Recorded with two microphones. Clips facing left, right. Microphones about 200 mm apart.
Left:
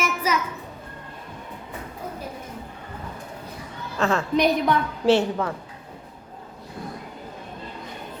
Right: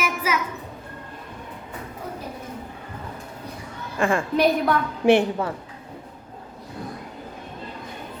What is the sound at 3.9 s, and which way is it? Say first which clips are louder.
Speech: even; 10° right (ahead or behind).